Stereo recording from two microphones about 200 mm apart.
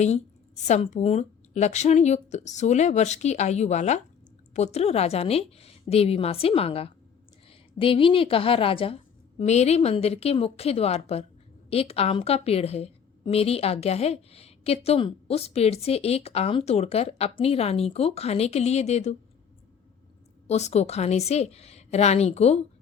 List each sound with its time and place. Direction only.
0.0 s a woman's voice: 35° left (ahead or behind)
20.5 s a woman's voice: 35° left (ahead or behind)